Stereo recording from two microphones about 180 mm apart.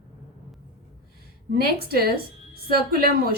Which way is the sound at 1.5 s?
60° right (ahead or behind).